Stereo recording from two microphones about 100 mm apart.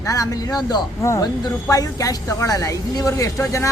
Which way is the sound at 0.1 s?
35° left (ahead or behind).